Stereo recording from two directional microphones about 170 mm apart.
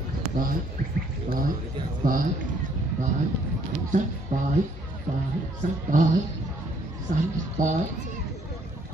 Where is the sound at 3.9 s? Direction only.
50° right (ahead or behind).